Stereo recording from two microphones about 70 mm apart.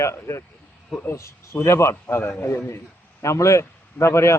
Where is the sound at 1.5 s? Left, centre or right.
Left.